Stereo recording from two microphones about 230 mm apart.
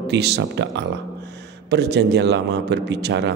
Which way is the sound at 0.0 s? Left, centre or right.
Right.